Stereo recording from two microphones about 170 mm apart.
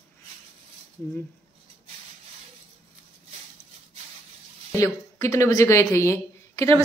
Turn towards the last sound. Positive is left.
turn(degrees=15)  # may be behind; listen again after turning